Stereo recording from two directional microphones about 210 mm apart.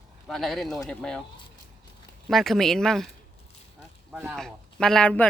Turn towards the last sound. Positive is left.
turn(degrees=5)  # may be behind; listen again after turning